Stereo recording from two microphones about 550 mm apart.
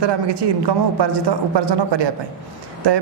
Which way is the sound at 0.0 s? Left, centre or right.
Right.